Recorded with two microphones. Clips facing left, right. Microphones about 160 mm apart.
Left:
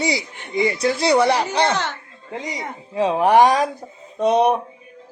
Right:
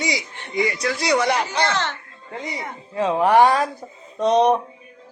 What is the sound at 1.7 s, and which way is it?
A woman's voice, 10° left (ahead or behind).